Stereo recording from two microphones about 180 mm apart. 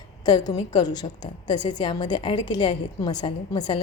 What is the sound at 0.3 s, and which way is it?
A woman's voice, 20° left (ahead or behind).